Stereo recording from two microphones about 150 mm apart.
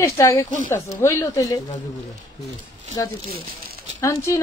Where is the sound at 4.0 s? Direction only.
20° left (ahead or behind).